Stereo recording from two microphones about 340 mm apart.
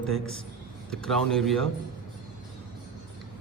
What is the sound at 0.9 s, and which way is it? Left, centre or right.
Speech, centre.